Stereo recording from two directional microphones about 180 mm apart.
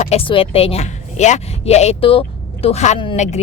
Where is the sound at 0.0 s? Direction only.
35° left (ahead or behind).